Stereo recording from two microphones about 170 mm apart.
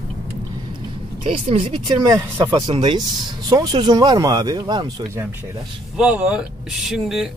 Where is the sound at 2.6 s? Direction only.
30° right (ahead or behind).